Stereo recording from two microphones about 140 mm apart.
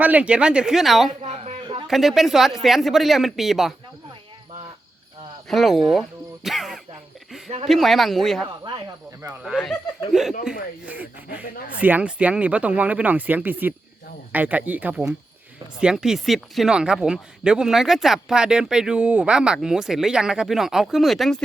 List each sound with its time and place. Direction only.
0.0 s speech: 10° right (ahead or behind)
1.2 s a sound: 55° right (ahead or behind)
1.9 s speech: centre (ahead or behind)
5.5 s speech: centre (ahead or behind)